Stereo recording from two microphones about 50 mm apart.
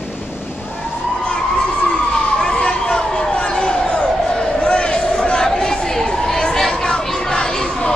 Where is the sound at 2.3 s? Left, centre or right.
Centre.